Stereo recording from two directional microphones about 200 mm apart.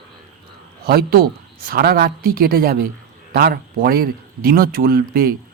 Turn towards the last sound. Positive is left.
turn(degrees=-50)  # may be behind; listen again after turning